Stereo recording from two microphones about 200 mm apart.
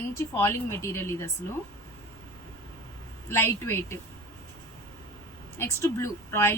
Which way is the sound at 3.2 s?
10° left (ahead or behind).